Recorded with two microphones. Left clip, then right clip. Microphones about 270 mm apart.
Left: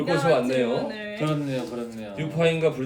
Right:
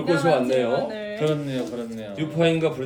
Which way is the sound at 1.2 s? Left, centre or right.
Centre.